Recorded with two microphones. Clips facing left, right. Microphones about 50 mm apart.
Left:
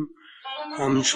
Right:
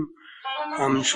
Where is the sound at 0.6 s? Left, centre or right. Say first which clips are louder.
Even; centre.